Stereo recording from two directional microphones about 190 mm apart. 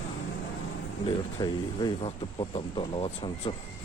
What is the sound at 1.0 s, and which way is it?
Speech, 20° left (ahead or behind).